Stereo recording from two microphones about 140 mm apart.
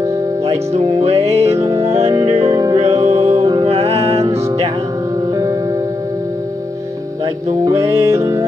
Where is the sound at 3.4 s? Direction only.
30° right (ahead or behind).